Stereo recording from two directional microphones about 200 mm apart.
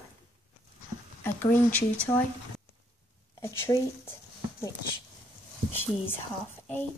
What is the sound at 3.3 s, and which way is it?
Speech, 15° left (ahead or behind).